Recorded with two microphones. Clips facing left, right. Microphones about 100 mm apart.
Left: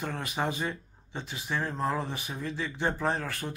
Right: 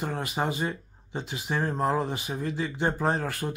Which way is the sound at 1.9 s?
20° right (ahead or behind).